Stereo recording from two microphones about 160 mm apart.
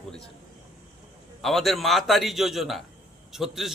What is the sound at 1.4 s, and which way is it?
A man's voice, centre (ahead or behind).